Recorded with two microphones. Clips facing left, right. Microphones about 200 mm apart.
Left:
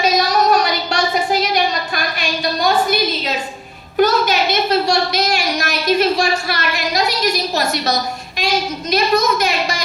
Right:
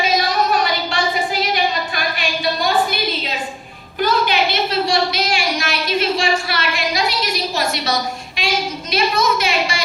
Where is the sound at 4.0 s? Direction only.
45° left (ahead or behind).